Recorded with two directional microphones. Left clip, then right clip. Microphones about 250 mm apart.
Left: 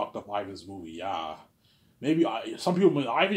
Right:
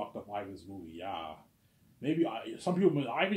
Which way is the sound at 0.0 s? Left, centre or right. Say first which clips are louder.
Left 7 dB; left.